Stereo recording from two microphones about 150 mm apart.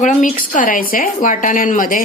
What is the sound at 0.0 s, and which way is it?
Speech, 60° left (ahead or behind).